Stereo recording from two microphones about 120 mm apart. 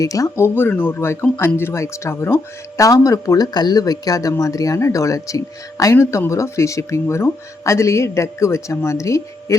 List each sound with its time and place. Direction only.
0.0 s speech: 30° left (ahead or behind)